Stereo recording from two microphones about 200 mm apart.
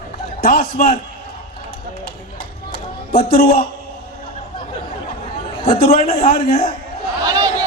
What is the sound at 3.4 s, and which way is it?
Speech, 45° left (ahead or behind).